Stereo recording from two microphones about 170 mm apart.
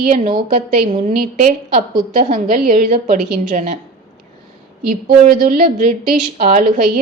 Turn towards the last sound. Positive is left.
turn(degrees=-55)  # may be behind; listen again after turning